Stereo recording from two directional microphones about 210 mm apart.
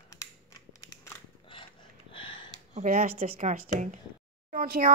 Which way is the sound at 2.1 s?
25° left (ahead or behind).